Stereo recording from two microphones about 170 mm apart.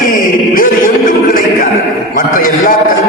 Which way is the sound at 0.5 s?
55° left (ahead or behind).